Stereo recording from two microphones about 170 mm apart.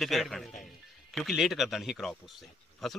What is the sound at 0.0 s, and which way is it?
Speech, centre (ahead or behind).